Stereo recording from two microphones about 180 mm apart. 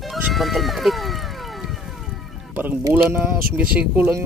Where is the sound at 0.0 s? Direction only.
Centre (ahead or behind).